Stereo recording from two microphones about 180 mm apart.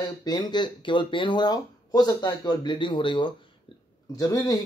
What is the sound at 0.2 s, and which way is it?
Speech, 25° left (ahead or behind).